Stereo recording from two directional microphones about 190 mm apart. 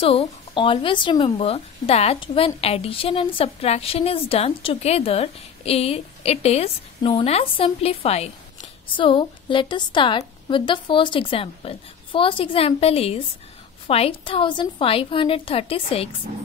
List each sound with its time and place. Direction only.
0.0 s speech: 30° left (ahead or behind)